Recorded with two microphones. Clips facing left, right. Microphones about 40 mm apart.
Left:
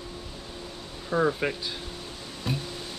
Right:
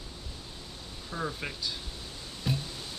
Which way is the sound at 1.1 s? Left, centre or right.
Left.